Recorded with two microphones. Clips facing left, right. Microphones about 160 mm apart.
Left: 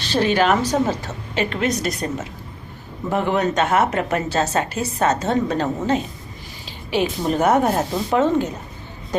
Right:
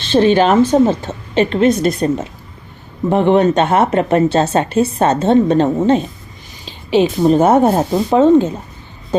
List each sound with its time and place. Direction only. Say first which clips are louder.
0.0 s a woman's voice: right 7 dB; 25° right (ahead or behind)